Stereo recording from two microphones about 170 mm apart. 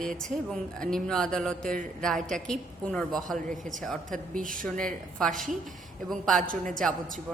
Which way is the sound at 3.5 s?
50° right (ahead or behind).